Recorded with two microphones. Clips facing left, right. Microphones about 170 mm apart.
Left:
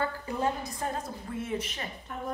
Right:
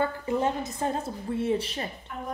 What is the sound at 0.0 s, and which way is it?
A woman's voice, 25° right (ahead or behind).